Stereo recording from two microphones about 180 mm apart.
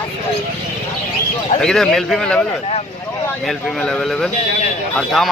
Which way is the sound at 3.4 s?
Centre (ahead or behind).